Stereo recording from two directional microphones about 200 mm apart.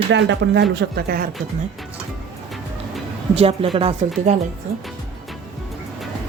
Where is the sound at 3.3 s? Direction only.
30° right (ahead or behind).